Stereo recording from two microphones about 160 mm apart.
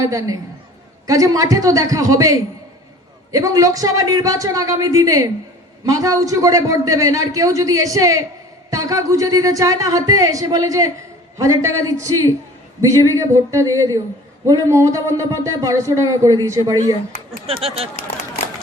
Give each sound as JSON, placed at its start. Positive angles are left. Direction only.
{"t": 0.0, "sound": "a man's voice", "side_deg": -20}
{"t": 17.4, "sound": "speech", "side_deg": -35}